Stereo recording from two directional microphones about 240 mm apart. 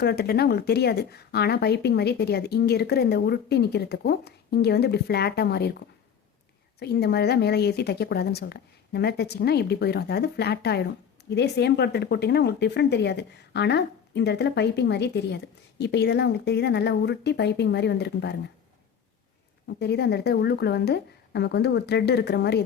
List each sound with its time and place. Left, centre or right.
0.0 s speech: left
19.6 s speech: left